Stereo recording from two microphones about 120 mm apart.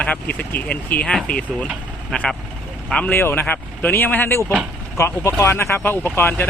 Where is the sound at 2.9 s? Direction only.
15° left (ahead or behind).